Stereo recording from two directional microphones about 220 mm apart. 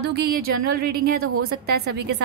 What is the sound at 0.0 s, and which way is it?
A woman's voice, 45° right (ahead or behind).